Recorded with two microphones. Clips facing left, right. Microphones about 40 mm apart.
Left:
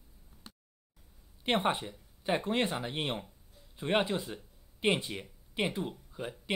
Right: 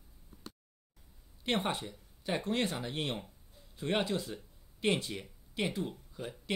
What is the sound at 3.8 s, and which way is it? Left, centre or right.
Speech, left.